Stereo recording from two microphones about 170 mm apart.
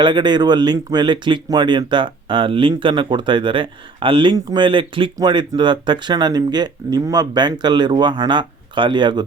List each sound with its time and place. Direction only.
0.0 s speech: 25° right (ahead or behind)